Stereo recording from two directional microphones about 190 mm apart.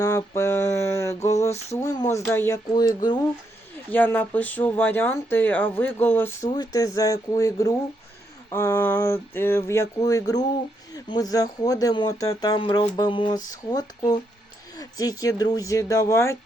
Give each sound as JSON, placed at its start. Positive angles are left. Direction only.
{"t": 0.0, "sound": "mantra", "side_deg": 15}
{"t": 1.4, "sound": "speech", "side_deg": 15}
{"t": 3.9, "sound": "speech", "side_deg": 10}
{"t": 14.8, "sound": "speech", "side_deg": 20}